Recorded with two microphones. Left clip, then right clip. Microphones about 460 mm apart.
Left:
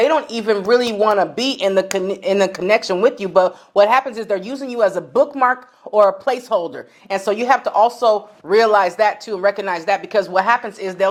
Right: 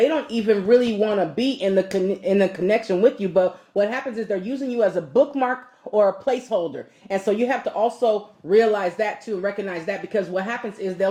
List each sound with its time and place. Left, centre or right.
0.0 s speech: left